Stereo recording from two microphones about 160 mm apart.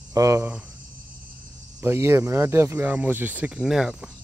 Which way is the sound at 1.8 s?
15° right (ahead or behind).